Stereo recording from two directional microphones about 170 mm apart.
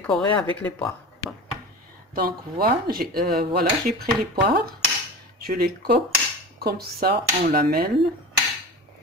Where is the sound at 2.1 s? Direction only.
60° right (ahead or behind).